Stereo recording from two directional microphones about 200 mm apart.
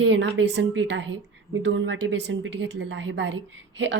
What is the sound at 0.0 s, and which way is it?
A woman's voice, 65° right (ahead or behind).